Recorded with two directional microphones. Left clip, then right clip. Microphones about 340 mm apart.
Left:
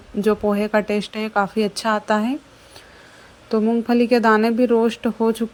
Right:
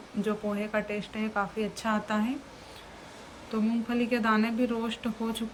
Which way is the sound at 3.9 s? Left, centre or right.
Centre.